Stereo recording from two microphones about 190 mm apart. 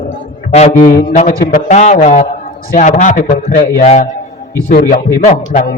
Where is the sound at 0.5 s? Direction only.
35° left (ahead or behind).